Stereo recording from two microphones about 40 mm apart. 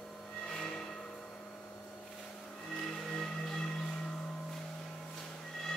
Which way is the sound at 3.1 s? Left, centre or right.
Centre.